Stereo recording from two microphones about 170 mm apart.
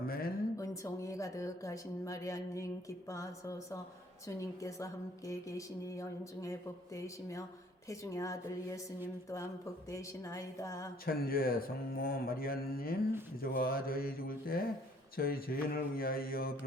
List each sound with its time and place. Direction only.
0.0 s a sound: 60° left (ahead or behind)
0.5 s a woman's voice: 20° left (ahead or behind)
9.9 s a woman's voice: 20° left (ahead or behind)
11.0 s speech: 60° left (ahead or behind)